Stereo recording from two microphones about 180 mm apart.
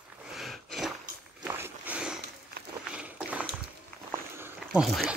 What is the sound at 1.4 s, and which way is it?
Walk, 10° right (ahead or behind).